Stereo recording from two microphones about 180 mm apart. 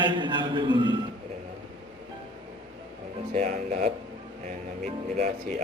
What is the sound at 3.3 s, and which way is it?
Speech, 45° right (ahead or behind).